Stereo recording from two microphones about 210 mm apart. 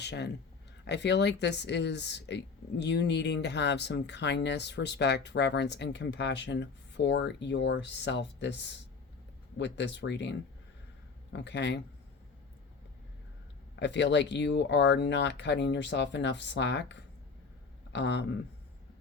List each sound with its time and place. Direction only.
0.0 s speech: 55° left (ahead or behind)
13.7 s speech: 55° left (ahead or behind)